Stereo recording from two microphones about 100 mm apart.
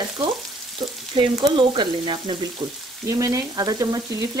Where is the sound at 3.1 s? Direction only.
35° right (ahead or behind).